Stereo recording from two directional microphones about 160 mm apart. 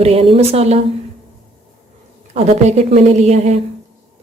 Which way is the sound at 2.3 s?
45° right (ahead or behind).